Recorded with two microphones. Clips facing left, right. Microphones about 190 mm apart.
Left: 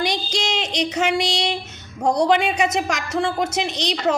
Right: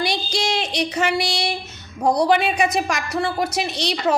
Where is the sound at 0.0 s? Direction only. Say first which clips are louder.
Even; 15° left (ahead or behind).